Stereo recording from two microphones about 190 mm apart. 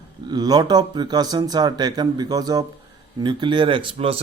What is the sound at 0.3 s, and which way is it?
Speech, 20° right (ahead or behind).